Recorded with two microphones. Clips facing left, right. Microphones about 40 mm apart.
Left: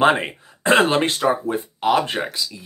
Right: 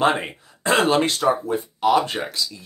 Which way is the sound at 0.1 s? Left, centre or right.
Left.